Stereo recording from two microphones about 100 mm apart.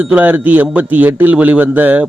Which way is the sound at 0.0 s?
15° right (ahead or behind).